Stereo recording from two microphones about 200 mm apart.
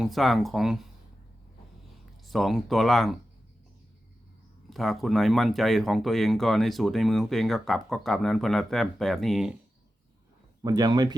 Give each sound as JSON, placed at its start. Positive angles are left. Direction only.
{"t": 0.0, "sound": "speech", "side_deg": 0}
{"t": 2.2, "sound": "speech", "side_deg": 0}
{"t": 4.7, "sound": "speech", "side_deg": 0}
{"t": 10.6, "sound": "speech", "side_deg": -20}